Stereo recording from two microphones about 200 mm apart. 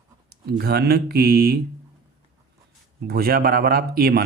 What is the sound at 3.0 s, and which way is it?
Speech, 50° right (ahead or behind).